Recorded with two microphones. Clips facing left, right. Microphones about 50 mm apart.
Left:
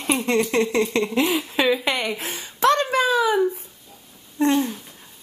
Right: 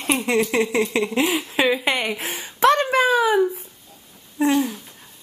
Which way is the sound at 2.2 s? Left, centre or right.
Right.